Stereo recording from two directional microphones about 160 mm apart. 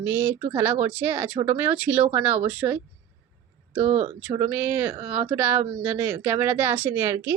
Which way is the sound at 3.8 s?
45° right (ahead or behind).